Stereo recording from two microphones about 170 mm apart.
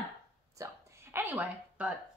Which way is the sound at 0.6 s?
20° right (ahead or behind).